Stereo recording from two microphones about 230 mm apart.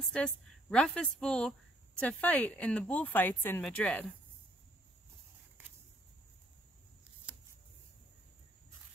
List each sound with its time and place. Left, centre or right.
0.1 s speech: centre